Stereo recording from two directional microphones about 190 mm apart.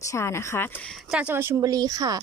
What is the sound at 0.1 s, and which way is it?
Speech, 15° left (ahead or behind).